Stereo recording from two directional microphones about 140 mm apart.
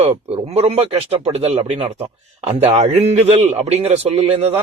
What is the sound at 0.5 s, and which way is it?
A man's voice, 45° right (ahead or behind).